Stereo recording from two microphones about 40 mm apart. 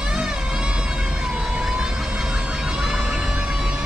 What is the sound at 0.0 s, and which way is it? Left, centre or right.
Vehicle, centre.